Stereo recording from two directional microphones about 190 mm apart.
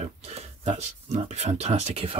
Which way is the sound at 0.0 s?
35° right (ahead or behind).